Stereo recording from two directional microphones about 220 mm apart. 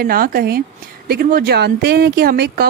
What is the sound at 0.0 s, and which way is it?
Speech, 40° right (ahead or behind).